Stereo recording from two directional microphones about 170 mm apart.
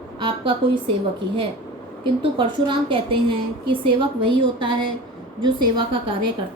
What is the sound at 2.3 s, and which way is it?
A woman's voice, 30° right (ahead or behind).